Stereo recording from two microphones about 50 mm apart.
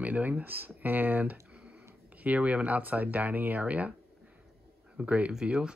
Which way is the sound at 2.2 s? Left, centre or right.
Right.